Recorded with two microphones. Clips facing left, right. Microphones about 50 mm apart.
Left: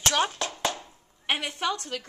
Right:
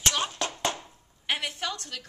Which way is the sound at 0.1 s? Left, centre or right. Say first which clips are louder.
Left 5 dB; left.